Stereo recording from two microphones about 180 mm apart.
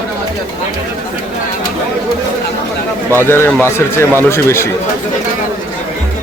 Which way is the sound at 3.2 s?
10° left (ahead or behind).